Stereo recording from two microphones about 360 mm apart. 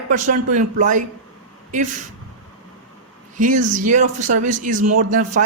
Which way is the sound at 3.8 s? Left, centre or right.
Right.